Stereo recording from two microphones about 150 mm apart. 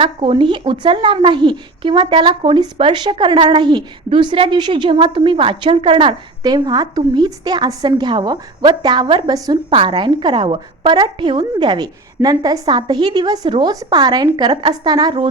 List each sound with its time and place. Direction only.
0.0 s a woman's voice: 35° right (ahead or behind)